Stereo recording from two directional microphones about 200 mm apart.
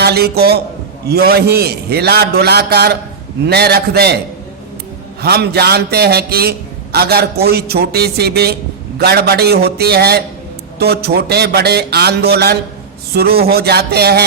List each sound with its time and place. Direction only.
0.0 s a man's voice: 55° right (ahead or behind)
5.2 s a man's voice: 50° right (ahead or behind)